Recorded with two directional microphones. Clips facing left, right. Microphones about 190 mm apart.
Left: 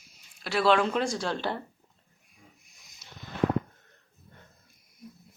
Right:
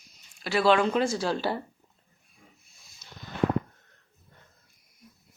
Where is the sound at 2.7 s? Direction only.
15° left (ahead or behind).